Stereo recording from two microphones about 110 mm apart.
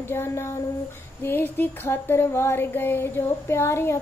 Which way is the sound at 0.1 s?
25° left (ahead or behind).